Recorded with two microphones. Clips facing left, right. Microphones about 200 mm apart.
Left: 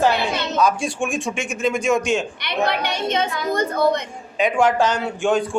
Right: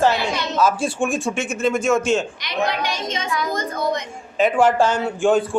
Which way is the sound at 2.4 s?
60° left (ahead or behind).